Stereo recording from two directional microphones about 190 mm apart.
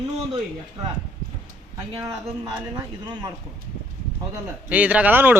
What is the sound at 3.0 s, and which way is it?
Speech, 20° right (ahead or behind).